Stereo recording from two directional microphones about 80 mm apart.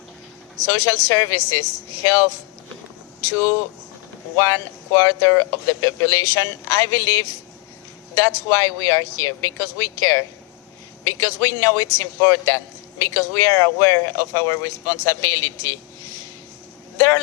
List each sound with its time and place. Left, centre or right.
0.7 s speech: left
3.2 s a man's voice: left